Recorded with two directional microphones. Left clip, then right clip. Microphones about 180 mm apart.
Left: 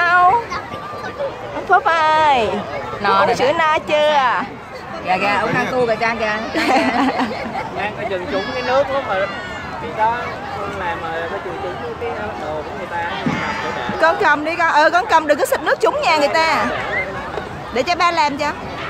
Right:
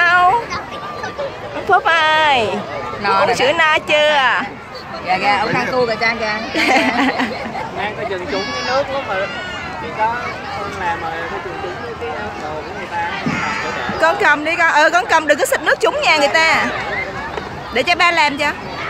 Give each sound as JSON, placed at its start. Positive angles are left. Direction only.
{"t": 0.0, "sound": "a sound", "side_deg": 0}
{"t": 1.7, "sound": "speech", "side_deg": 5}
{"t": 3.0, "sound": "speech", "side_deg": 45}
{"t": 3.3, "sound": "a woman's voice", "side_deg": 5}
{"t": 5.0, "sound": "speech", "side_deg": 45}
{"t": 5.8, "sound": "speech", "side_deg": 30}
{"t": 6.5, "sound": "a woman's voice", "side_deg": 0}
{"t": 8.3, "sound": "speech", "side_deg": 50}
{"t": 14.0, "sound": "a woman's voice", "side_deg": 0}
{"t": 17.7, "sound": "a woman's voice", "side_deg": 0}